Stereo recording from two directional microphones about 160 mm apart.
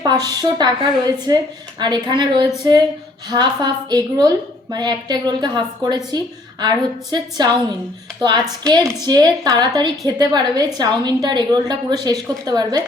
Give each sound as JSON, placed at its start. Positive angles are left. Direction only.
{"t": 0.0, "sound": "a woman's voice", "side_deg": -25}